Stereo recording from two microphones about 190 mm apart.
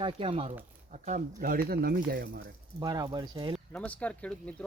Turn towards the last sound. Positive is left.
turn(degrees=5)  # may be behind; listen again after turning